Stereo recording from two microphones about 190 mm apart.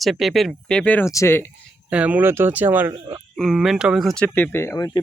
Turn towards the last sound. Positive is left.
turn(degrees=15)  # may be behind; listen again after turning